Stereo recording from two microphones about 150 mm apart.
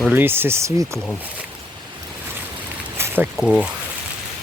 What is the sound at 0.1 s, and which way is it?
Speech, 15° right (ahead or behind).